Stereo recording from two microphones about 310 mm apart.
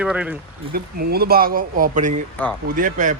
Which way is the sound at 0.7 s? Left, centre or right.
Right.